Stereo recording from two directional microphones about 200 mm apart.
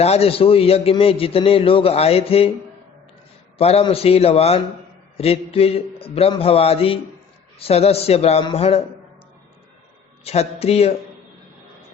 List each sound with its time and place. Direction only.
0.0 s a man's voice: 30° left (ahead or behind)
3.6 s a man's voice: 30° left (ahead or behind)
10.2 s a man's voice: 30° left (ahead or behind)